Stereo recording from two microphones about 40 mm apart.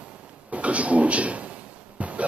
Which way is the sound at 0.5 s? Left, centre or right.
Right.